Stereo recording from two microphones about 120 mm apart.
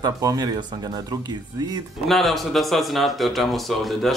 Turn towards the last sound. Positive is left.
turn(degrees=0)  # may be behind; listen again after turning